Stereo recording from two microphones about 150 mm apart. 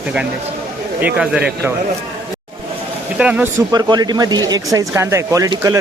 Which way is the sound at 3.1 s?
10° right (ahead or behind).